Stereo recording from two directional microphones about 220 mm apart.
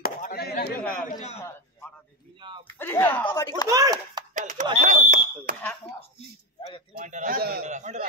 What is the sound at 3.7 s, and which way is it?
Speech, 15° right (ahead or behind).